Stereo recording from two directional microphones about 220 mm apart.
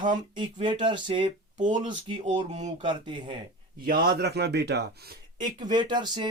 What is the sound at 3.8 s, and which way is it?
Speech, 45° right (ahead or behind).